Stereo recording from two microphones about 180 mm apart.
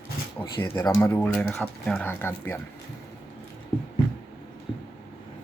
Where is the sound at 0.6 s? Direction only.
15° left (ahead or behind).